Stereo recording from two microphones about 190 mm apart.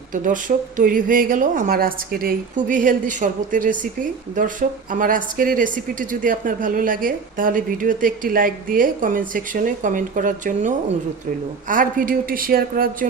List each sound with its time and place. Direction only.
0.1 s speech: 45° right (ahead or behind)